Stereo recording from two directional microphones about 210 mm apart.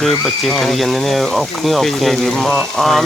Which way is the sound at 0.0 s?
Centre (ahead or behind).